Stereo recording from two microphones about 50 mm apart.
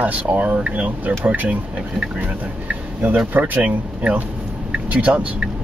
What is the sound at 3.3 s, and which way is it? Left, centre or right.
Speech, right.